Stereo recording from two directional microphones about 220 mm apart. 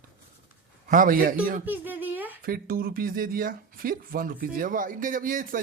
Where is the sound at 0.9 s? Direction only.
40° right (ahead or behind).